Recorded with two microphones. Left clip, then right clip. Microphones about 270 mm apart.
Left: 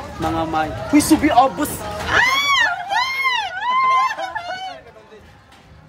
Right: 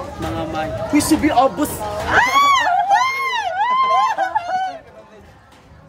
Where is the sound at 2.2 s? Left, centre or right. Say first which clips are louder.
Right 2 dB; right.